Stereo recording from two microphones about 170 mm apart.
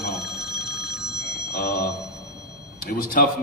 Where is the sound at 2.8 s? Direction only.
55° left (ahead or behind).